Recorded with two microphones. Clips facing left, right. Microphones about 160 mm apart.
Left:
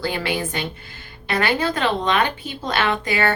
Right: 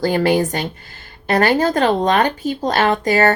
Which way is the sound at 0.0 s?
45° right (ahead or behind).